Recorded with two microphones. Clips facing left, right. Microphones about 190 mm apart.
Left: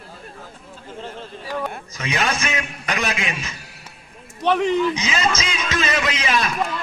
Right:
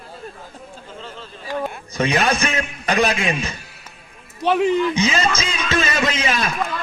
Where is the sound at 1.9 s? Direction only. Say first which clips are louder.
Right 7 dB; 35° right (ahead or behind).